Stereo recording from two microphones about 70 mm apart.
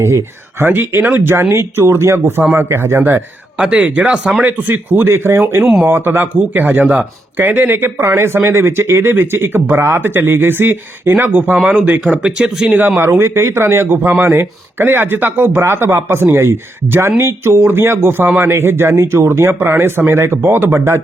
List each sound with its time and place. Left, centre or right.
0.0 s speech: right
0.7 s speech: right
3.6 s speech: centre
4.4 s speech: right
13.1 s speech: right